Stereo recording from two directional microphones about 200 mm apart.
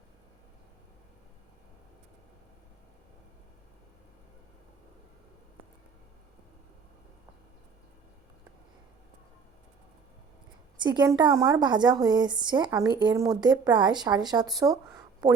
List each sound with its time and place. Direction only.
10.8 s a woman's voice: 20° right (ahead or behind)